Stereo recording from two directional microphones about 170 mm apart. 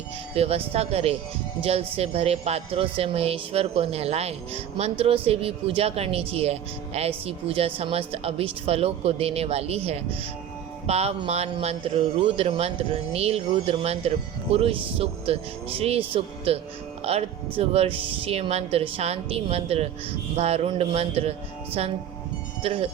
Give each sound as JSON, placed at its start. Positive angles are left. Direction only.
{"t": 0.3, "sound": "a woman's voice", "side_deg": -35}